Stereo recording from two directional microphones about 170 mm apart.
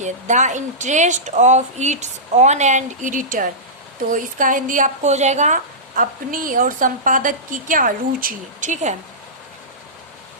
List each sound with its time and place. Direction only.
0.0 s a woman's voice: 45° right (ahead or behind)
6.0 s a woman's voice: 55° right (ahead or behind)